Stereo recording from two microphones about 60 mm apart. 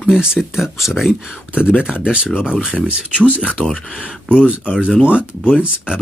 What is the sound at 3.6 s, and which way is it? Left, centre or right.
Speech, left.